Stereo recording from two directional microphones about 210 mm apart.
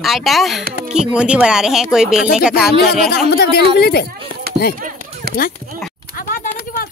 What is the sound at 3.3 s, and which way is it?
Speech, 50° left (ahead or behind).